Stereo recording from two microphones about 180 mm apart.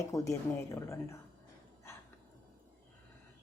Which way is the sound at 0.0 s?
15° left (ahead or behind).